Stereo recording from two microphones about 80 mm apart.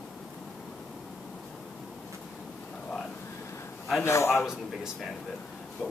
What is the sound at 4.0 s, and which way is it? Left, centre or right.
Speech, left.